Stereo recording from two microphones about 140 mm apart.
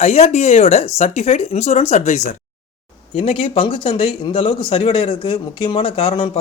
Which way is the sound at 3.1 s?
40° left (ahead or behind).